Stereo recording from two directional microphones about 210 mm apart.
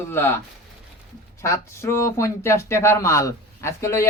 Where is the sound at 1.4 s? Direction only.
15° left (ahead or behind).